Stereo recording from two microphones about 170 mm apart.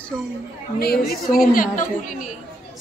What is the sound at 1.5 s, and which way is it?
Speech, 50° left (ahead or behind).